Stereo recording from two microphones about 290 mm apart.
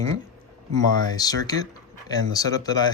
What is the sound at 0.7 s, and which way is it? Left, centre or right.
Speech, centre.